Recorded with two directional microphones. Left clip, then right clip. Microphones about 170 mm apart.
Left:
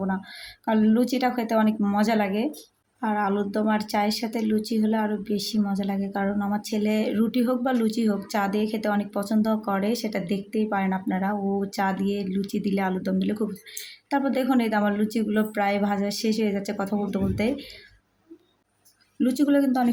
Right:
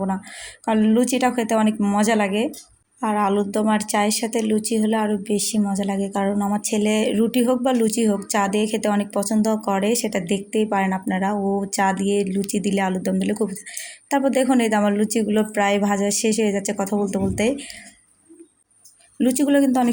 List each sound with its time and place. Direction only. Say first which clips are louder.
0.6 s speech: right 4 dB; 15° right (ahead or behind)
19.2 s speech: right 4 dB; 20° right (ahead or behind)